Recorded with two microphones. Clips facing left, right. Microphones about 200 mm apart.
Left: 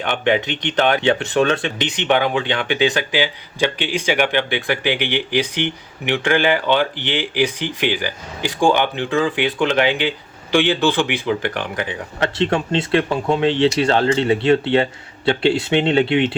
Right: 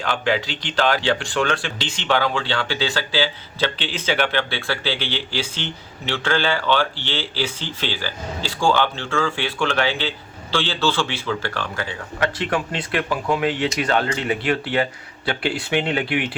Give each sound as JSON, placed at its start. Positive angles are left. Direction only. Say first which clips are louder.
{"t": 0.0, "sound": "speech", "louder": "left 3 dB", "side_deg": 20}